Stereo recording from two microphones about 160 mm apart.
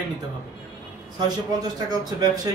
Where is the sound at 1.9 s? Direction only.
25° right (ahead or behind).